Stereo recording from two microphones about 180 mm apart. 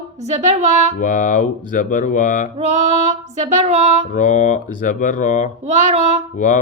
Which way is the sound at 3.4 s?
40° right (ahead or behind).